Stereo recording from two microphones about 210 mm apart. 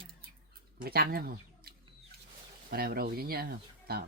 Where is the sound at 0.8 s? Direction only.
45° right (ahead or behind).